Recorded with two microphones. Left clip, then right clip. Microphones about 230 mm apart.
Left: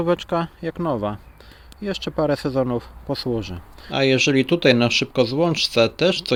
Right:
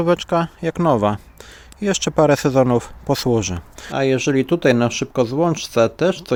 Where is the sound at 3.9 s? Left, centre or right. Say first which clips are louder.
Even; centre.